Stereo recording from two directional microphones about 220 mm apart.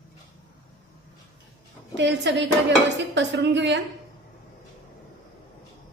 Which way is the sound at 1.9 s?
55° right (ahead or behind).